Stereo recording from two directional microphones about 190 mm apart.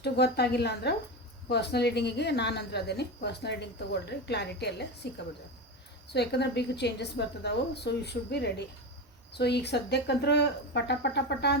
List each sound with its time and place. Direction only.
0.0 s a woman's voice: 60° left (ahead or behind)